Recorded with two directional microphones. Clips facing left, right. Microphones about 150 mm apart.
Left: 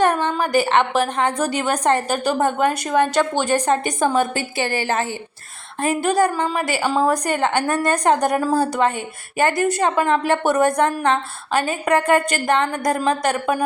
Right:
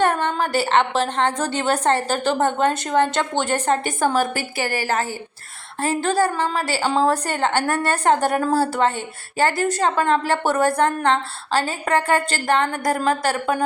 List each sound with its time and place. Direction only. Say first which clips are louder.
0.2 s a woman's voice: left 2 dB; 15° left (ahead or behind)